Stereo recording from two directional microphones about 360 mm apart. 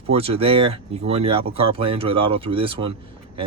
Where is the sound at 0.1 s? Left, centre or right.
Centre.